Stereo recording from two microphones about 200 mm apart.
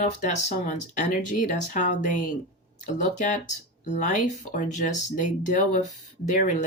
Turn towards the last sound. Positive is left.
turn(degrees=40)  # may be behind; listen again after turning